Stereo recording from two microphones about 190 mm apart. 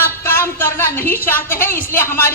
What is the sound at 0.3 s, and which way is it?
A woman's voice, 10° left (ahead or behind).